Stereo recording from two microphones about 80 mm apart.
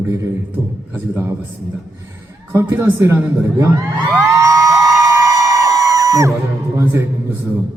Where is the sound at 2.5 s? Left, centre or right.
Right.